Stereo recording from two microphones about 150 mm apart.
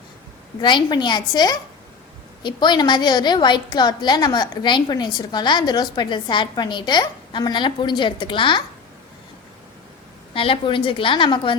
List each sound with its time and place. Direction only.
0.6 s a woman's voice: 30° left (ahead or behind)
10.3 s a woman's voice: 35° left (ahead or behind)